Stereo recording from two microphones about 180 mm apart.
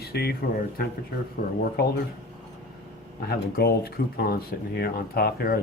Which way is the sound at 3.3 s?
60° left (ahead or behind).